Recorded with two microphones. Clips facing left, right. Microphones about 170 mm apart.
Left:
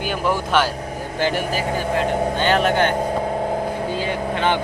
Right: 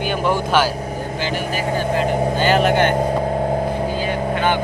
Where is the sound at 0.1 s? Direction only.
Centre (ahead or behind).